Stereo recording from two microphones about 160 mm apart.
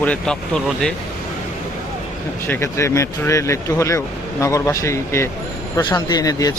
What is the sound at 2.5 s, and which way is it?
Speech, 15° left (ahead or behind).